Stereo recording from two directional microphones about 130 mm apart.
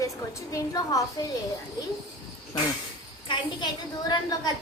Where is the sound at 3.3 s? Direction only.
35° left (ahead or behind).